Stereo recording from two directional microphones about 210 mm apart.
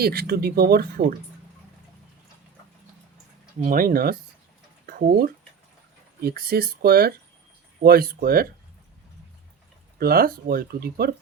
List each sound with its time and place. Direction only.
0.0 s speech: 45° right (ahead or behind)
3.6 s speech: 40° right (ahead or behind)
10.0 s speech: 45° right (ahead or behind)